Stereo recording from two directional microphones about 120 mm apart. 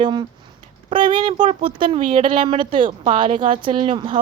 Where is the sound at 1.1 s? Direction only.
45° right (ahead or behind).